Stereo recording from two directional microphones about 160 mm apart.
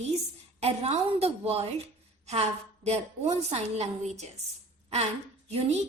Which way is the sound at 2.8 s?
40° right (ahead or behind).